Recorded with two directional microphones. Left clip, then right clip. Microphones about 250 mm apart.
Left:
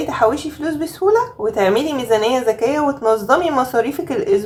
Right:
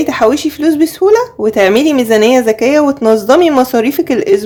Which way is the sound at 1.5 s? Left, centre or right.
Right.